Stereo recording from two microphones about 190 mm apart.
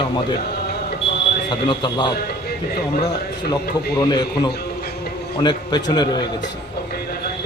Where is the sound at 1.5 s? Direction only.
25° left (ahead or behind).